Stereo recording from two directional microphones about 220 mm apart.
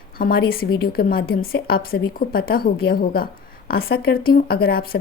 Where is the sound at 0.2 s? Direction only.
40° left (ahead or behind).